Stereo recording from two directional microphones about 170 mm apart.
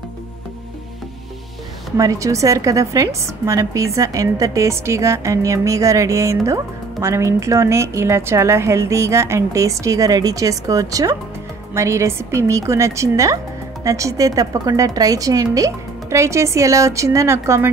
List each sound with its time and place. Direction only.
2.0 s a woman's voice: 20° right (ahead or behind)